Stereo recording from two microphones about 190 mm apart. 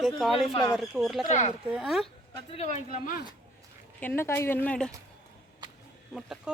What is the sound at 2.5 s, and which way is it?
Speech, 35° left (ahead or behind).